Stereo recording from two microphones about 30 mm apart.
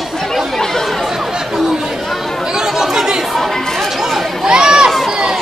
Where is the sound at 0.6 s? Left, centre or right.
Centre.